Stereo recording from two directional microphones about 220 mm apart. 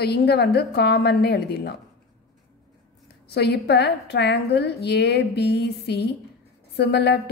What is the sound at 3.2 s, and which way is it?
A woman's voice, 45° left (ahead or behind).